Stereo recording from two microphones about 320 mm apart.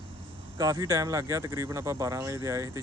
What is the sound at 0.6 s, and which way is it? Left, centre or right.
Speech, centre.